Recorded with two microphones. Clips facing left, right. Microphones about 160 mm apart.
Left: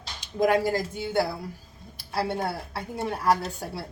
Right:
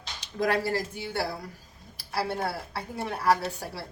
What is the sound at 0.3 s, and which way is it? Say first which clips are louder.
Speech: left 4 dB; 20° left (ahead or behind).